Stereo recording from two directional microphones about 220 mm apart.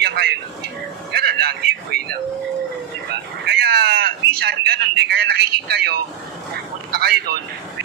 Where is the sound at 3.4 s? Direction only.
50° right (ahead or behind).